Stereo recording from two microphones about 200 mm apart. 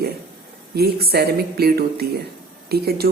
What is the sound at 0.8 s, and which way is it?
Speech, 50° right (ahead or behind).